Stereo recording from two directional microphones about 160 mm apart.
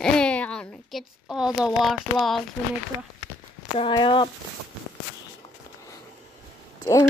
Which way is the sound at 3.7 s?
30° left (ahead or behind).